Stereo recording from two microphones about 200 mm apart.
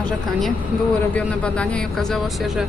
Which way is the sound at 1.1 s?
5° left (ahead or behind).